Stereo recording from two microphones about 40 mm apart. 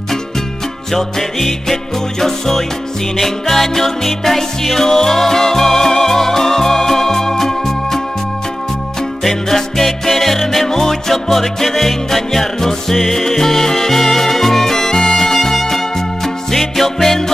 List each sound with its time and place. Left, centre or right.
0.9 s music: centre
9.2 s music: centre